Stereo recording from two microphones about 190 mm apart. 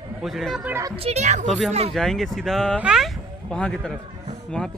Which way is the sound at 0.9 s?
35° right (ahead or behind).